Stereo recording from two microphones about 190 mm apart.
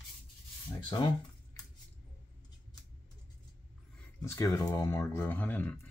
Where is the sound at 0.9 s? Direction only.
25° left (ahead or behind).